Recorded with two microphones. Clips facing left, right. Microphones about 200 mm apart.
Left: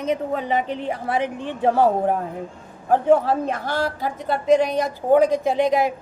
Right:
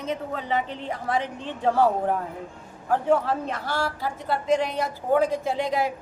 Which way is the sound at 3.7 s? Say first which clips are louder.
Left 4 dB; 20° left (ahead or behind).